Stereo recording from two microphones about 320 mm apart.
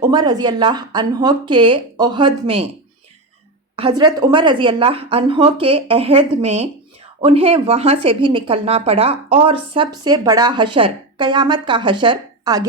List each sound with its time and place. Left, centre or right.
0.0 s a woman's voice: centre
3.8 s a woman's voice: centre